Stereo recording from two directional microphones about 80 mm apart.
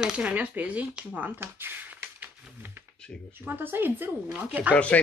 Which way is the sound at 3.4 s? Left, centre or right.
Right.